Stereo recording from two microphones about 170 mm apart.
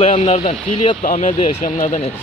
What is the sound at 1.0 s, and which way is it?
Speech, 50° left (ahead or behind).